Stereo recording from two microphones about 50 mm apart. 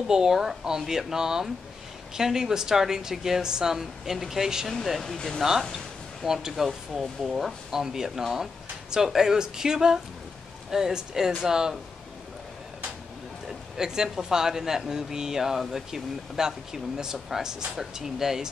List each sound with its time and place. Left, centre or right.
0.1 s speech: centre
5.1 s speech: centre
5.4 s speech: centre
13.5 s speech: centre